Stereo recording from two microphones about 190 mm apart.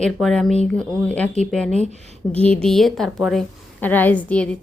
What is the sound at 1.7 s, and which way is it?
Speech, 35° right (ahead or behind).